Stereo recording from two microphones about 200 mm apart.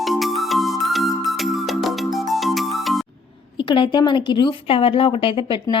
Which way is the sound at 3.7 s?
25° left (ahead or behind).